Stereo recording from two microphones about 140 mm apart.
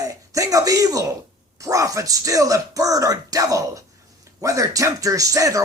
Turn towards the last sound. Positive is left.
turn(degrees=-25)  # may be behind; listen again after turning